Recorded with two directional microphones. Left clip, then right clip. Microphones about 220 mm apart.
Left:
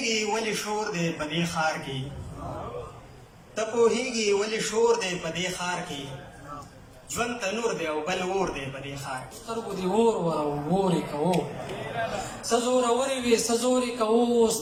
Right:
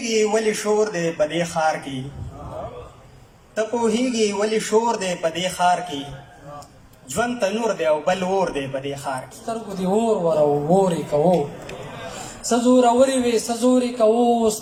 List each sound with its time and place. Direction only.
0.0 s a man's voice: 35° right (ahead or behind)
3.5 s a man's voice: 35° right (ahead or behind)
7.1 s a man's voice: 35° right (ahead or behind)
11.9 s a sound: 35° left (ahead or behind)
12.5 s a man's voice: 35° right (ahead or behind)